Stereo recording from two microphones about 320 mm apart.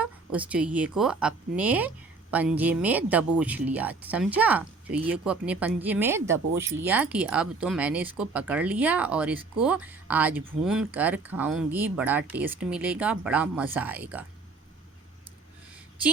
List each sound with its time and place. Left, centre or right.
0.0 s speech: centre